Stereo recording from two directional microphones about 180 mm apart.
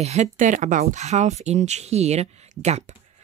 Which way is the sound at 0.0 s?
40° right (ahead or behind).